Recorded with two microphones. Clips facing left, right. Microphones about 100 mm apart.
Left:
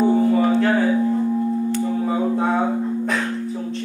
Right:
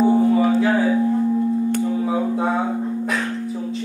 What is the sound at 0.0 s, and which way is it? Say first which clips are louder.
Music: right 1 dB; 5° right (ahead or behind).